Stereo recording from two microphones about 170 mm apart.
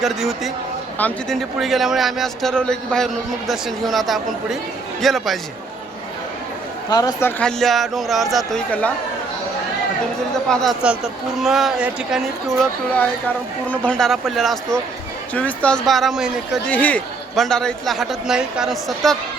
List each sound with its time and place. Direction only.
0.0 s a man's voice: centre (ahead or behind)
6.9 s a man's voice: 20° left (ahead or behind)
10.5 s a man's voice: centre (ahead or behind)
13.7 s a man's voice: 5° left (ahead or behind)